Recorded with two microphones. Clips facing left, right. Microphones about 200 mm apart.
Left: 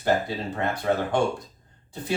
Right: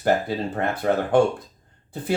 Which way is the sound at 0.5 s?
55° right (ahead or behind).